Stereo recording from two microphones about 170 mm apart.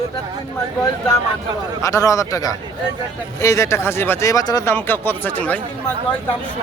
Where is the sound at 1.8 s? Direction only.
20° left (ahead or behind).